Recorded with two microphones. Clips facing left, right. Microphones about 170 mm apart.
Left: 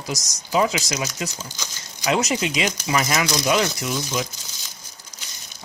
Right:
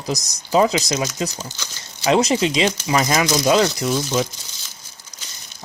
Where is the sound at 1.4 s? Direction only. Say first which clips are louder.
Right 2 dB; 10° left (ahead or behind).